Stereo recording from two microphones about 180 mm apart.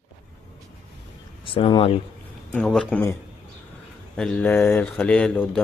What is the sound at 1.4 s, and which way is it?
Speech, 30° left (ahead or behind).